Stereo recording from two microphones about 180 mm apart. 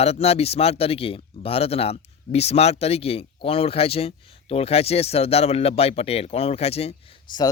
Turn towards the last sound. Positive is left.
turn(degrees=25)  # may be behind; listen again after turning